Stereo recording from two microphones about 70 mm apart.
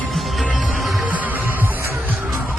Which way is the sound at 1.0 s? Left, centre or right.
Right.